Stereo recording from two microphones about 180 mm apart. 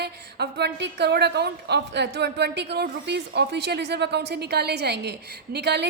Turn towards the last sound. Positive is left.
turn(degrees=-65)  # may be behind; listen again after turning